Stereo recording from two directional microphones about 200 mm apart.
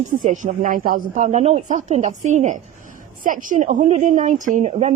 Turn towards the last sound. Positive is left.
turn(degrees=-35)  # may be behind; listen again after turning